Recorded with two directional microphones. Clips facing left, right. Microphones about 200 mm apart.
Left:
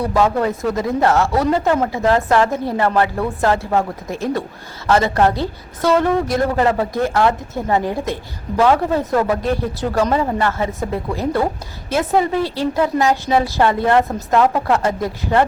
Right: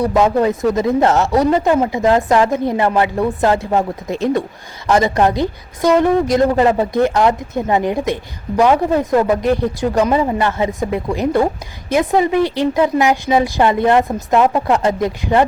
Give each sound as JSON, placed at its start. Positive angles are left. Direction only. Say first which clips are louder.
{"t": 0.1, "sound": "speech", "louder": "right 3 dB", "side_deg": -20}
{"t": 9.9, "sound": "speech", "louder": "right 1 dB", "side_deg": -15}